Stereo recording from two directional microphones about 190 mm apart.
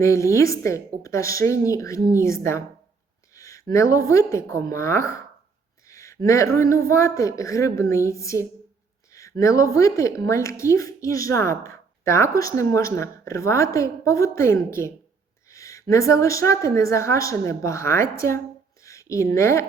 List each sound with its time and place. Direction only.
0.0 s a woman's voice: 15° left (ahead or behind)